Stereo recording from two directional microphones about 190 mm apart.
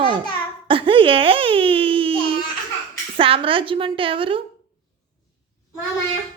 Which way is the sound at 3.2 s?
30° right (ahead or behind).